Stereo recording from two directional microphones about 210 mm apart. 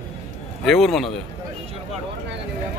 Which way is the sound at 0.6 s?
Centre (ahead or behind).